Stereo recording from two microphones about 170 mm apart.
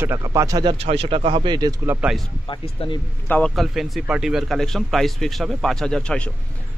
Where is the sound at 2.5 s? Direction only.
30° left (ahead or behind).